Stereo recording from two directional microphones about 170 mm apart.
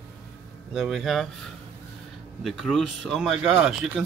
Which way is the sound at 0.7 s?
Centre (ahead or behind).